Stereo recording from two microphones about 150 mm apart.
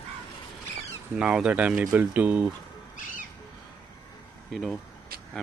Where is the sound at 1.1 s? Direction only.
5° right (ahead or behind).